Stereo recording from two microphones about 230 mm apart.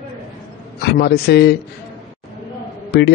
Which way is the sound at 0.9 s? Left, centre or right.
Left.